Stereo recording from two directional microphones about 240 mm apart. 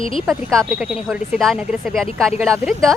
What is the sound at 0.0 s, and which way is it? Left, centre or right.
Speech, left.